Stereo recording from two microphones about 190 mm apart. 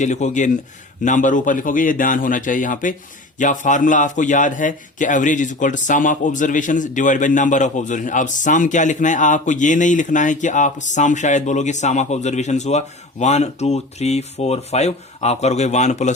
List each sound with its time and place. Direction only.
0.0 s a man's voice: 40° left (ahead or behind)